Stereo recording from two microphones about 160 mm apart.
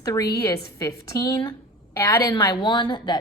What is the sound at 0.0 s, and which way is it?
A woman's voice, 20° left (ahead or behind).